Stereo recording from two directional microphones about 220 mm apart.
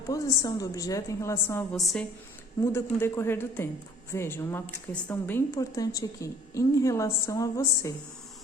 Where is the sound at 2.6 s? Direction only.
10° left (ahead or behind).